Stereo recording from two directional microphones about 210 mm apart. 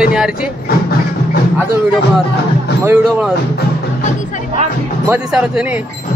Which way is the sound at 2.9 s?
5° right (ahead or behind).